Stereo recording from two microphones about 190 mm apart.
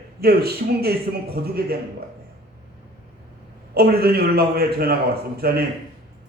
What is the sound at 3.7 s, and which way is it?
A man's voice, 55° right (ahead or behind).